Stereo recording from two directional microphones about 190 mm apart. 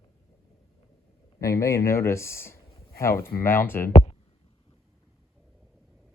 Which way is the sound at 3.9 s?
30° left (ahead or behind).